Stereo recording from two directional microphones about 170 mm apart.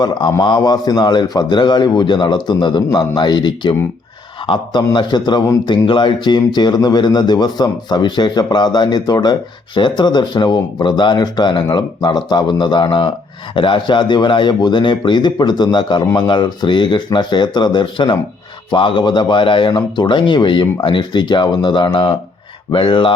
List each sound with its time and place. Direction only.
0.0 s speech: 25° left (ahead or behind)